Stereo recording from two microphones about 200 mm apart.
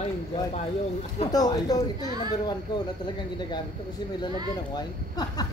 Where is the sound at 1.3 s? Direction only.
20° left (ahead or behind).